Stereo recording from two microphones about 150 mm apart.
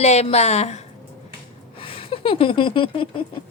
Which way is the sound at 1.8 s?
35° left (ahead or behind).